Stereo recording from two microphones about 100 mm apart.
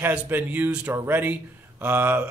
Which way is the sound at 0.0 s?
20° right (ahead or behind).